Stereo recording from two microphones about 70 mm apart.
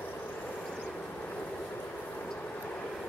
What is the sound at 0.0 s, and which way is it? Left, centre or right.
Vehicle, left.